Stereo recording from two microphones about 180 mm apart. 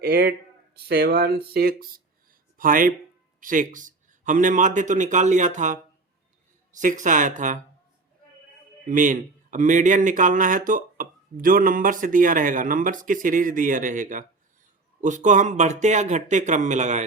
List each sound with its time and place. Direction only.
0.0 s a man's voice: 55° right (ahead or behind)
8.9 s a man's voice: 45° right (ahead or behind)